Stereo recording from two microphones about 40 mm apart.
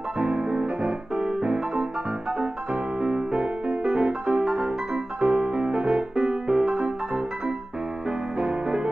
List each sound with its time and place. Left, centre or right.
0.2 s music: right